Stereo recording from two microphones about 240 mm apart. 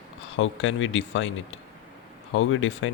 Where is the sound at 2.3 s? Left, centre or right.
Left.